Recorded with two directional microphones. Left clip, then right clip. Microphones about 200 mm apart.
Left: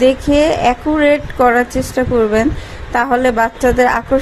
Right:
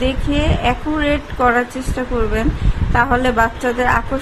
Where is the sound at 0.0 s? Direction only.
25° left (ahead or behind).